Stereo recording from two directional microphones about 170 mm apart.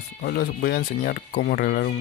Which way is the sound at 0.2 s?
60° left (ahead or behind).